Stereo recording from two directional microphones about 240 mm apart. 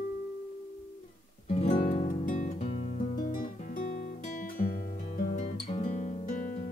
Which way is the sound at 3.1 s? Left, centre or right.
Left.